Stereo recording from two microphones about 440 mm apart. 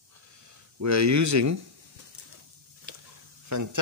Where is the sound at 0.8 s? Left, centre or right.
Right.